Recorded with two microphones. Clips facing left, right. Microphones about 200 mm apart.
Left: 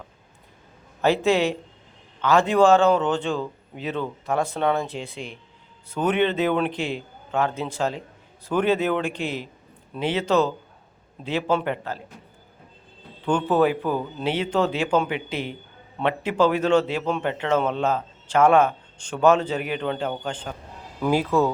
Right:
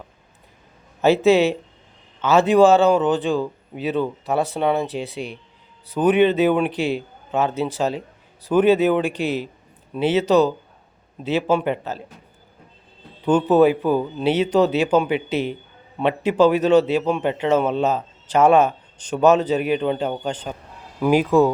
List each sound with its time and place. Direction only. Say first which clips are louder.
1.2 s a man's voice: right 5 dB; 20° right (ahead or behind)
13.2 s speech: right 5 dB; 20° right (ahead or behind)